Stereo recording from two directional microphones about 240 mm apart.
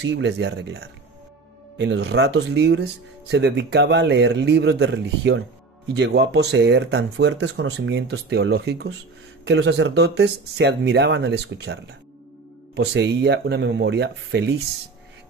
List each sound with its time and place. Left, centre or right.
0.0 s speech: right